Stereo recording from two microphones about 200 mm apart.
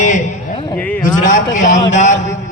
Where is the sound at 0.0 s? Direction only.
35° left (ahead or behind).